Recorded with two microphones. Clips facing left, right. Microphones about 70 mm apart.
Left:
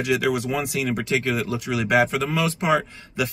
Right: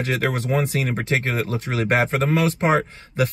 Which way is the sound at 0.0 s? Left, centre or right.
Right.